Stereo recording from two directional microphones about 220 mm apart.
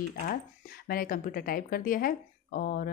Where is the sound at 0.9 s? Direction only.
40° left (ahead or behind).